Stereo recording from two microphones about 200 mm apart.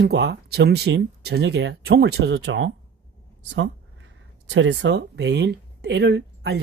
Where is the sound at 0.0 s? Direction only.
55° right (ahead or behind).